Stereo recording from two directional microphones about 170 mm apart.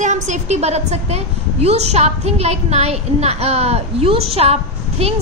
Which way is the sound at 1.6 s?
40° right (ahead or behind).